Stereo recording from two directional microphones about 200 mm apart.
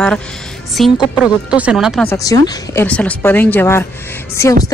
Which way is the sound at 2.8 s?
5° left (ahead or behind).